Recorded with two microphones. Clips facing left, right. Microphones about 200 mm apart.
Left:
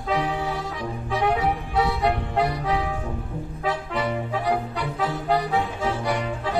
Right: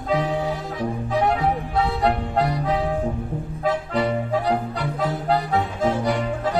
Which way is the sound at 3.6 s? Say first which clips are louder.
Right 4 dB; 40° right (ahead or behind).